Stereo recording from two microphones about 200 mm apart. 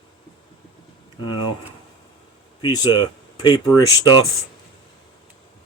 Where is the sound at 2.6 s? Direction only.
20° left (ahead or behind).